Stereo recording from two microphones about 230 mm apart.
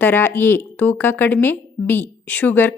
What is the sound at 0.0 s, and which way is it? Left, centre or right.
Speech, centre.